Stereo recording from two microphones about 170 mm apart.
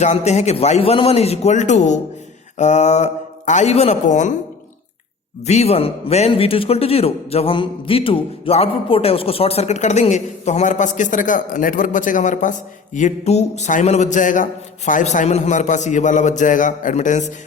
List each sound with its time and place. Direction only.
0.0 s a man's voice: 40° left (ahead or behind)
5.5 s a man's voice: 40° left (ahead or behind)